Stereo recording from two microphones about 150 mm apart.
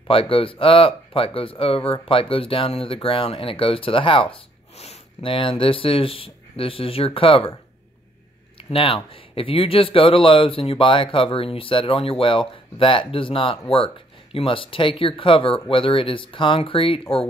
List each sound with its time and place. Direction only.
0.1 s speech: 35° left (ahead or behind)
8.6 s speech: 35° left (ahead or behind)